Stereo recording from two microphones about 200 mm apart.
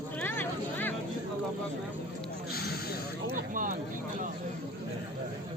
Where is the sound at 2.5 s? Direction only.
50° left (ahead or behind).